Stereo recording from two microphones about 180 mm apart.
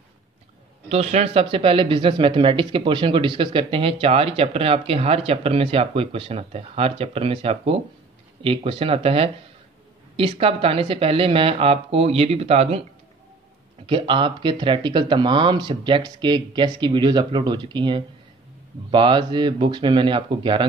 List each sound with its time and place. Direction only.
0.8 s speech: 35° right (ahead or behind)
13.8 s speech: 30° right (ahead or behind)